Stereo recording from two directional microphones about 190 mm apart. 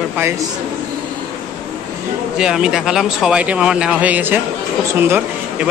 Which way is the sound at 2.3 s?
5° right (ahead or behind).